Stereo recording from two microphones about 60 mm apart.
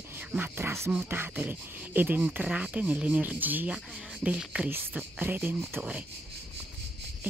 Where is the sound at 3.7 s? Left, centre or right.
Centre.